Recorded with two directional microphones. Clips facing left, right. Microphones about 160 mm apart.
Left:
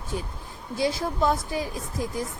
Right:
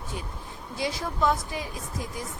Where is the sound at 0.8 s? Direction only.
35° left (ahead or behind).